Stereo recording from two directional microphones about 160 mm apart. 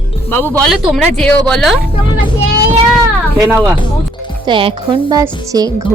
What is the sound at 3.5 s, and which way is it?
Speech, 15° right (ahead or behind).